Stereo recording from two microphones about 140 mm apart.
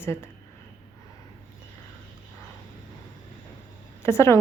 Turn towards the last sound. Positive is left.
turn(degrees=20)  # may be behind; listen again after turning